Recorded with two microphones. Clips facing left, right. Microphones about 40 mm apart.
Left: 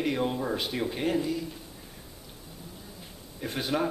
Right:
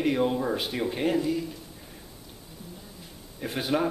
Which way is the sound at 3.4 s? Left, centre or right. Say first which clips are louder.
Right 2 dB; centre.